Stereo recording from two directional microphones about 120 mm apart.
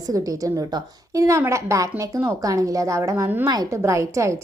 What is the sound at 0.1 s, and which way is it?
A woman's voice, 30° right (ahead or behind).